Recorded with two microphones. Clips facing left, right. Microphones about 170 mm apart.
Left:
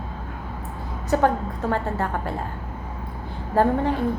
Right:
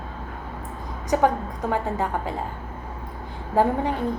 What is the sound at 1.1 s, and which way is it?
A woman's voice, 15° right (ahead or behind).